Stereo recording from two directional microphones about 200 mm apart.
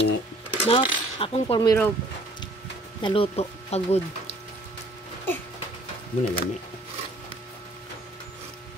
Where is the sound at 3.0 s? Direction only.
25° left (ahead or behind).